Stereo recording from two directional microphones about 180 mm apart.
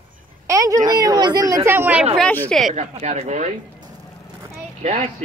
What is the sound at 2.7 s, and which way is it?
Speech, 40° right (ahead or behind).